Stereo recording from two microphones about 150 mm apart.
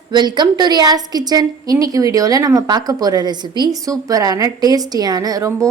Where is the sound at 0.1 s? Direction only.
30° right (ahead or behind).